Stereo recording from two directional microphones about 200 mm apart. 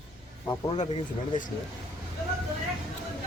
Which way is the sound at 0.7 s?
35° left (ahead or behind).